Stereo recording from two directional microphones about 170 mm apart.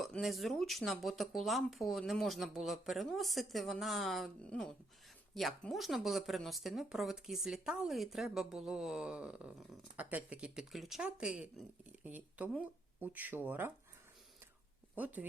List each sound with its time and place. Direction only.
0.0 s speech: centre (ahead or behind)
14.9 s speech: 10° right (ahead or behind)